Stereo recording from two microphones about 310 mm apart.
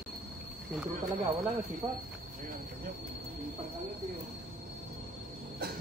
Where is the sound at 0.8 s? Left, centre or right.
Centre.